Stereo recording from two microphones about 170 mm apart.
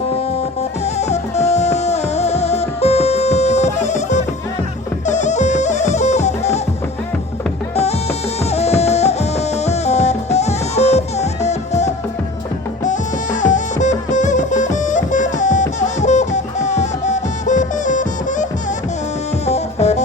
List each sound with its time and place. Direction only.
0.9 s music: 40° left (ahead or behind)
8.5 s music: 40° left (ahead or behind)
13.4 s music: 45° left (ahead or behind)
19.5 s music: 40° left (ahead or behind)